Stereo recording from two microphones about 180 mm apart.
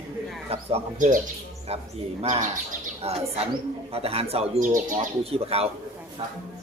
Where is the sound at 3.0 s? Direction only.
35° right (ahead or behind).